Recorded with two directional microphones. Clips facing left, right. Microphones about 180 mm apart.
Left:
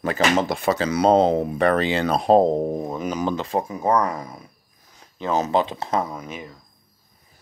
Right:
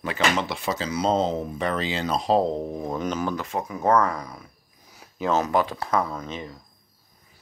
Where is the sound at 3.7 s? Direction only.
10° left (ahead or behind).